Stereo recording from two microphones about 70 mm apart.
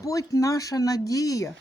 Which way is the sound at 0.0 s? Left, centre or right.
Left.